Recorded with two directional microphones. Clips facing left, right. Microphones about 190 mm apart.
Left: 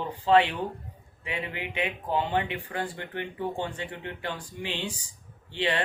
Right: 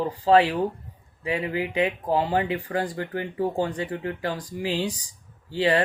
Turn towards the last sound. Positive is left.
turn(degrees=-40)  # may be behind; listen again after turning